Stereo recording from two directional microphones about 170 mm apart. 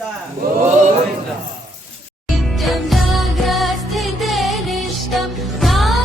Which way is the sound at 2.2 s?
Centre (ahead or behind).